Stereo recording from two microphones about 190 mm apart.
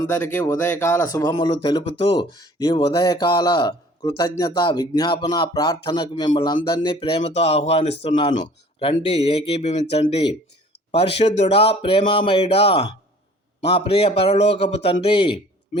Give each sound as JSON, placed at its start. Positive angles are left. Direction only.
{"t": 0.0, "sound": "speech", "side_deg": 15}